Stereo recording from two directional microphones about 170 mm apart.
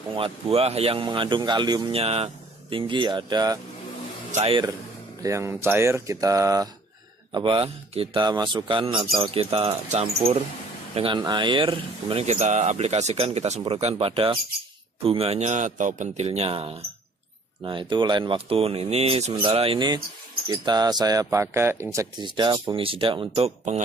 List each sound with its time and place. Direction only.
0.1 s speech: 35° right (ahead or behind)
2.0 s a man's voice: 35° right (ahead or behind)
4.3 s speech: 35° right (ahead or behind)
5.2 s speech: 15° right (ahead or behind)
7.3 s a man's voice: 30° right (ahead or behind); by 21.8 s 15° right (ahead or behind)
21.9 s speech: 25° right (ahead or behind)